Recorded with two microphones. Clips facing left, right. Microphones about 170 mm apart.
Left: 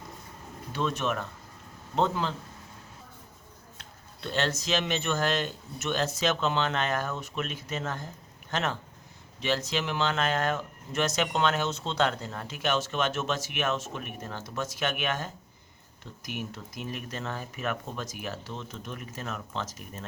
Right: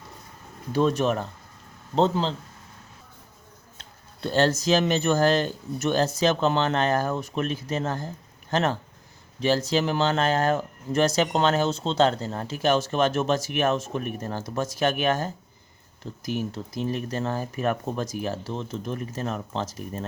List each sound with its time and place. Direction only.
0.7 s speech: 40° right (ahead or behind)
3.8 s speech: 40° right (ahead or behind)